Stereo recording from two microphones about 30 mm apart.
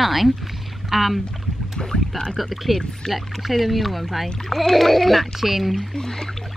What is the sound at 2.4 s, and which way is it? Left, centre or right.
Speech, centre.